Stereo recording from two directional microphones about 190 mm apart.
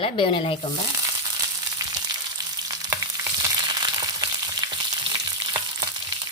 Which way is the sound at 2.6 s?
20° right (ahead or behind).